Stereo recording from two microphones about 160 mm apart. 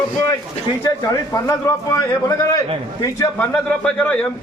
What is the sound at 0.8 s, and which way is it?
A man's voice, 20° left (ahead or behind).